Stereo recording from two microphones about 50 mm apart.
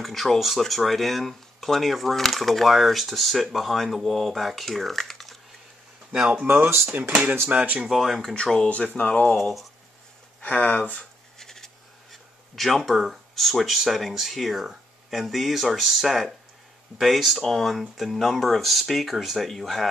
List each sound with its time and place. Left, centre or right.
0.0 s speech: centre
6.4 s speech: right
6.9 s speech: right
7.8 s speech: centre
8.8 s speech: left
9.3 s speech: centre
10.4 s speech: left
11.3 s speech: centre